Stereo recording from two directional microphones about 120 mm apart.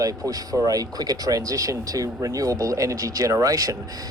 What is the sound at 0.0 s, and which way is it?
Speech, 30° right (ahead or behind).